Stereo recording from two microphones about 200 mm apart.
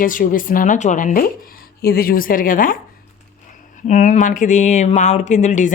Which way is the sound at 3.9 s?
35° left (ahead or behind).